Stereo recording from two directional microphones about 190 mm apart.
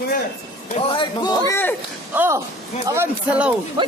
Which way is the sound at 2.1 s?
10° right (ahead or behind).